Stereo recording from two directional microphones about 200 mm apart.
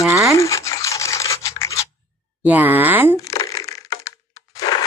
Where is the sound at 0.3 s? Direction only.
15° left (ahead or behind).